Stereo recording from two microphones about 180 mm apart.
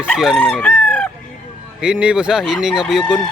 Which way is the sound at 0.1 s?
5° right (ahead or behind).